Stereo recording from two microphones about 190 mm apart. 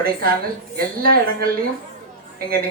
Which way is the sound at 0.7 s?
50° right (ahead or behind).